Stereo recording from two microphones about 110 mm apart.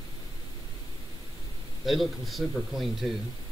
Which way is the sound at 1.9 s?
Centre (ahead or behind).